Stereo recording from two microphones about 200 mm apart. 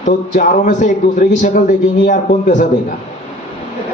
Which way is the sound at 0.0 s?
40° left (ahead or behind).